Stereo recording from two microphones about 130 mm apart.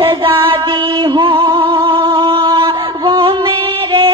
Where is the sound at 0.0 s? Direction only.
45° right (ahead or behind).